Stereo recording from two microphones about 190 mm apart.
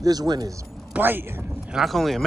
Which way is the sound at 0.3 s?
20° right (ahead or behind).